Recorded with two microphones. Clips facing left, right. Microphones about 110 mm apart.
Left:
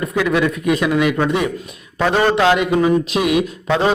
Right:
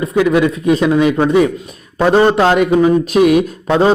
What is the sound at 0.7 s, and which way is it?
A man's voice, 30° right (ahead or behind).